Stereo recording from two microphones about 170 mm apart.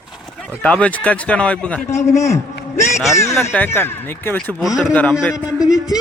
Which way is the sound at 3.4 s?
10° left (ahead or behind).